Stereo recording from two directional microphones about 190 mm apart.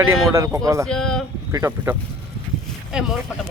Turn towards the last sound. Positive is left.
turn(degrees=0)  # may be behind; listen again after turning